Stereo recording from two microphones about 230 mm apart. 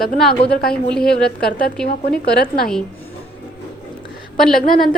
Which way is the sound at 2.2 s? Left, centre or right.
Left.